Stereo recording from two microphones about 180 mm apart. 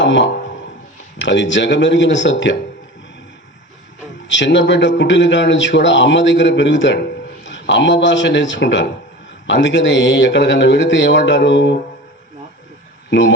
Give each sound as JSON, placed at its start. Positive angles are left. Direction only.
{"t": 0.0, "sound": "a man's voice", "side_deg": 85}
{"t": 4.3, "sound": "a man's voice", "side_deg": 85}
{"t": 13.1, "sound": "speech", "side_deg": 90}